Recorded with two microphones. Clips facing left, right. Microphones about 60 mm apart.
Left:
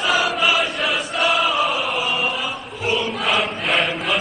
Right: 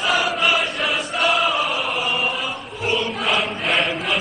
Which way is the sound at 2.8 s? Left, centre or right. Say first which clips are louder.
Left 1 dB; centre.